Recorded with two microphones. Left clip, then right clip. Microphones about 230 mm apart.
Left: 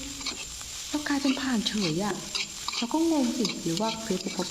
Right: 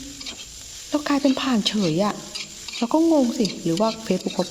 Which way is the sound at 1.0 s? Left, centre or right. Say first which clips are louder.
Right 6 dB; right.